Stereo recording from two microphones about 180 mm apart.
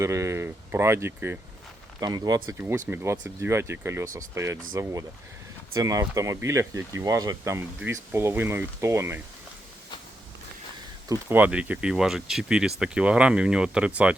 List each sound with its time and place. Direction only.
0.0 s speech: 15° right (ahead or behind)
11.1 s speech: 10° right (ahead or behind)